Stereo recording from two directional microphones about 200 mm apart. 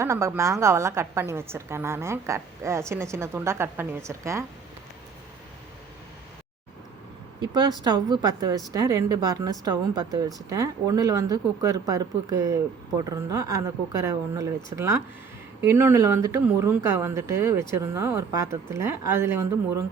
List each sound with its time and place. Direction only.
0.0 s a woman's voice: 15° right (ahead or behind)
7.5 s a woman's voice: 20° right (ahead or behind)